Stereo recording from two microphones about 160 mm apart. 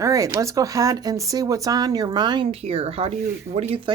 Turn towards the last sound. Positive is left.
turn(degrees=-35)  # may be behind; listen again after turning